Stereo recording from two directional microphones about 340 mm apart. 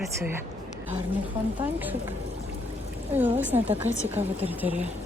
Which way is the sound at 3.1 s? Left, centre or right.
Centre.